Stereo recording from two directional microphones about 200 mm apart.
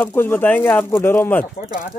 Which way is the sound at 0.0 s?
10° left (ahead or behind).